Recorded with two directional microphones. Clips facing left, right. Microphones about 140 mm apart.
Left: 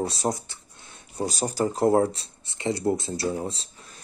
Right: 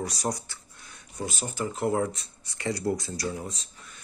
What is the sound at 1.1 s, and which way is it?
Speech, 35° left (ahead or behind).